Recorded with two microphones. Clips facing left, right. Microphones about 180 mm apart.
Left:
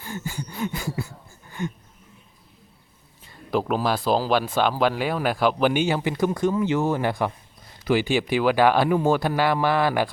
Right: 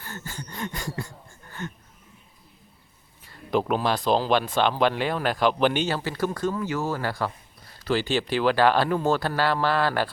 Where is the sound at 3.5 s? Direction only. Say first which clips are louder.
Left 1 dB; 5° left (ahead or behind).